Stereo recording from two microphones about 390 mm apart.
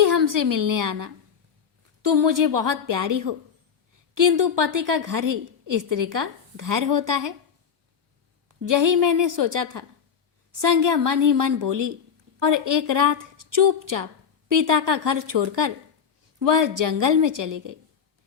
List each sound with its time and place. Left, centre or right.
0.3 s a woman's voice: right
8.6 s a woman's voice: right